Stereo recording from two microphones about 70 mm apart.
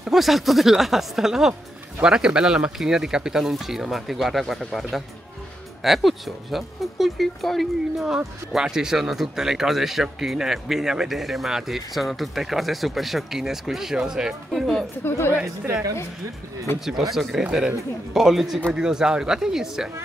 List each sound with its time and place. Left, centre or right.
0.0 s speech: centre
15.0 s a woman's voice: left
17.1 s speech: centre